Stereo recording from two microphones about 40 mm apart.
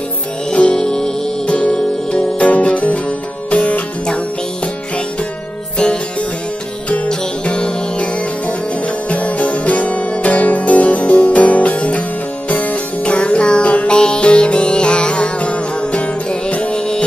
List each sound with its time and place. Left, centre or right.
0.5 s music: left
7.1 s music: left
9.1 s music: left
16.7 s music: centre